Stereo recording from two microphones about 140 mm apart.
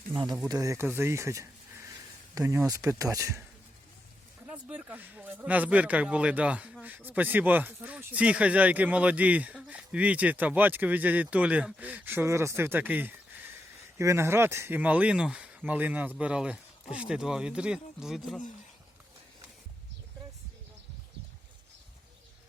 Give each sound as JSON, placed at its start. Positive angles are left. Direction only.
{"t": 0.4, "sound": "speech", "side_deg": -25}
{"t": 4.4, "sound": "speech", "side_deg": -10}